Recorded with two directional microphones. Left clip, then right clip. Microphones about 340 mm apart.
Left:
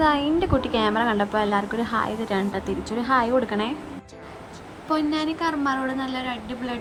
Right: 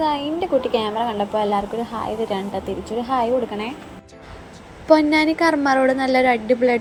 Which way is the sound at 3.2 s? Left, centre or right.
Centre.